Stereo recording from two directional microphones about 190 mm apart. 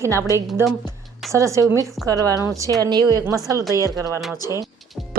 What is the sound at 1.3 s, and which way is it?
Speech, 15° right (ahead or behind).